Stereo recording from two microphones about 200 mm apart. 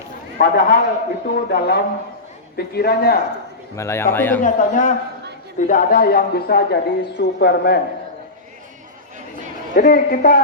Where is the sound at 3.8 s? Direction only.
15° left (ahead or behind).